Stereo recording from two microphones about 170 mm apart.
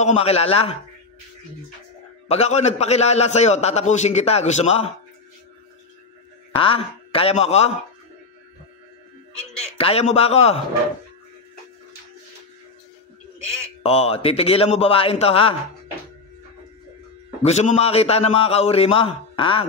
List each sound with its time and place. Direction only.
0.0 s a man's voice: 35° left (ahead or behind)
2.2 s a man's voice: 40° left (ahead or behind)
6.6 s a man's voice: 35° left (ahead or behind)
9.4 s speech: 5° left (ahead or behind)
9.8 s a man's voice: 35° left (ahead or behind)
13.8 s a man's voice: 35° left (ahead or behind)
17.4 s a man's voice: 40° left (ahead or behind)